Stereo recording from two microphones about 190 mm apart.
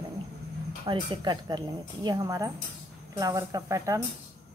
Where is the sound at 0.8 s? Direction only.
25° right (ahead or behind).